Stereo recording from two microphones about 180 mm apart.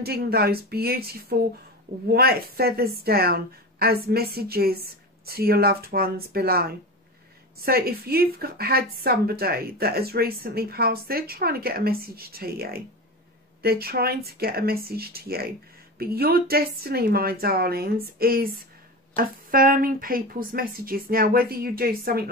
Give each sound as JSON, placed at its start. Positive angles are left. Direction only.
{"t": 0.0, "sound": "a woman's voice", "side_deg": -60}